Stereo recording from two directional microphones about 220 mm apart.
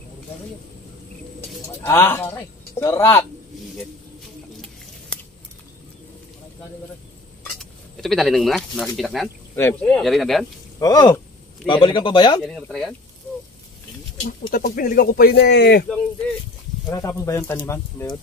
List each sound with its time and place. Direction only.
1.8 s speech: 10° left (ahead or behind)
8.0 s speech: centre (ahead or behind)
10.8 s a man's voice: 15° left (ahead or behind)
12.4 s speech: centre (ahead or behind)
14.2 s speech: 35° left (ahead or behind)
16.9 s speech: 15° left (ahead or behind)